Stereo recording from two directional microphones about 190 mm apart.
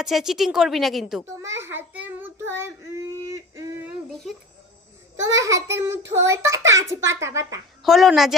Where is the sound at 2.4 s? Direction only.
15° right (ahead or behind).